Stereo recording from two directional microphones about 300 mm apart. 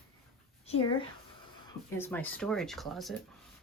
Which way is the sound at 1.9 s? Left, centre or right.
Centre.